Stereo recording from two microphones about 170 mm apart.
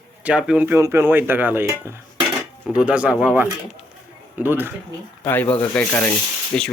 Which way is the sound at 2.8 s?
5° right (ahead or behind).